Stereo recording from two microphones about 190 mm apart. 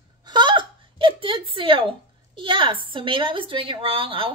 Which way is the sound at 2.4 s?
25° right (ahead or behind).